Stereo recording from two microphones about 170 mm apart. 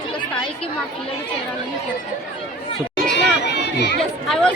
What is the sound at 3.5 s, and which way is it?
Chatter, 80° left.